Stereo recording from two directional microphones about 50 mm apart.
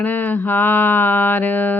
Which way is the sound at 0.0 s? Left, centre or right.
Left.